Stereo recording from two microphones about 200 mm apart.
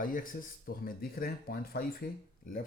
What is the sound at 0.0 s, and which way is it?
Speech, 45° left (ahead or behind).